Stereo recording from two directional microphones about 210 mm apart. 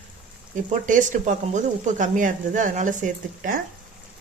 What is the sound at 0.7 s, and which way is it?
Speech, 40° right (ahead or behind).